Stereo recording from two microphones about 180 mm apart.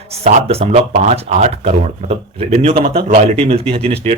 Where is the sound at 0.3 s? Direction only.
35° right (ahead or behind).